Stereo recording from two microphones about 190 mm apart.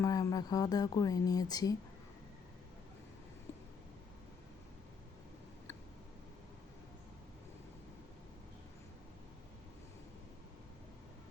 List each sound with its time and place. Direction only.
0.0 s speech: 20° left (ahead or behind)